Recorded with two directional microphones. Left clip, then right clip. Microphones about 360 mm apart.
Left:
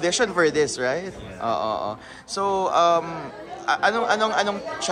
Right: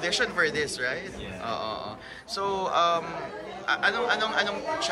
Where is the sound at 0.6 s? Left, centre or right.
Centre.